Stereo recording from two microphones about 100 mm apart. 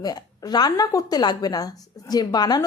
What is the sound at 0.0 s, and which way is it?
A woman's voice, 40° left (ahead or behind).